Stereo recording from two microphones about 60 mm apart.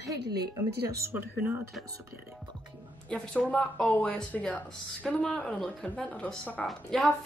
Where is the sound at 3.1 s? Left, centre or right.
Left.